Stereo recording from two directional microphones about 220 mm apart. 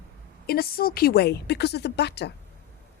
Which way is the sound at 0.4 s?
45° left (ahead or behind).